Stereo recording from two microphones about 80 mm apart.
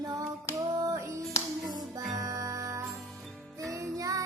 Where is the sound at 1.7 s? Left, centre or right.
Right.